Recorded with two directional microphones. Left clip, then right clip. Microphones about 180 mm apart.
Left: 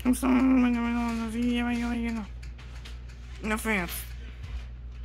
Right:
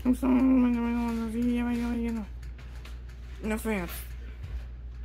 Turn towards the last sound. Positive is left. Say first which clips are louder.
# left 3 dB
turn(degrees=-15)  # may be behind; listen again after turning